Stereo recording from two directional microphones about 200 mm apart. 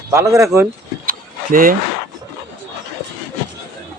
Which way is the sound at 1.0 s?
45° right (ahead or behind).